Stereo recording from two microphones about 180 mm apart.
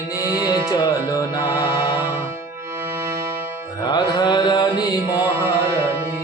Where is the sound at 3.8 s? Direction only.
25° left (ahead or behind).